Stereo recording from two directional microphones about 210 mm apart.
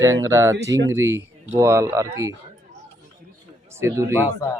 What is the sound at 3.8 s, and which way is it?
Speech, 15° right (ahead or behind).